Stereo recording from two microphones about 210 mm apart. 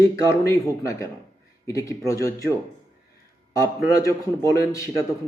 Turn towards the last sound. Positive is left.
turn(degrees=15)  # may be behind; listen again after turning